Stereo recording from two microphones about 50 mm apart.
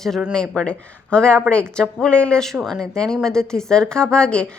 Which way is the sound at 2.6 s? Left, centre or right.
Centre.